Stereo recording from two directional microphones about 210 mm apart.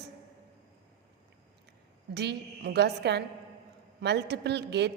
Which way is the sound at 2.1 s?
55° right (ahead or behind).